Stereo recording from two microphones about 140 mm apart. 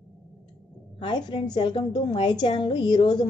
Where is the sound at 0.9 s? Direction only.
35° left (ahead or behind).